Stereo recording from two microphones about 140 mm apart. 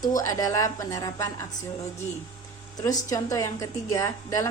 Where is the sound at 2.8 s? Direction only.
25° left (ahead or behind).